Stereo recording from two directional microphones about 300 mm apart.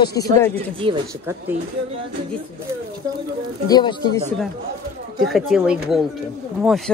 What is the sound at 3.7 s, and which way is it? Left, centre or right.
Speech, centre.